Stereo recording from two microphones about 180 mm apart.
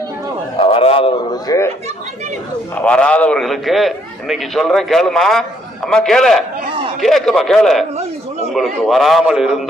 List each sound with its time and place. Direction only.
0.6 s a sound: 30° left (ahead or behind)
1.5 s speech: 20° left (ahead or behind)
2.7 s a man's voice: 5° left (ahead or behind)